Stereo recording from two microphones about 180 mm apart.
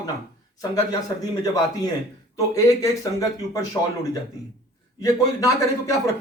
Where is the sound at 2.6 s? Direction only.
15° left (ahead or behind).